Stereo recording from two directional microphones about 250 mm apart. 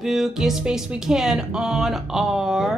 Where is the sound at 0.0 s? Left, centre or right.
Centre.